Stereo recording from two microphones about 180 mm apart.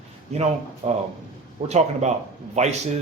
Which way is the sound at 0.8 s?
40° right (ahead or behind).